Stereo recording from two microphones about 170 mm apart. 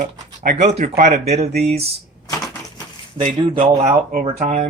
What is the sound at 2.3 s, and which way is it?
Crushing, 20° left (ahead or behind).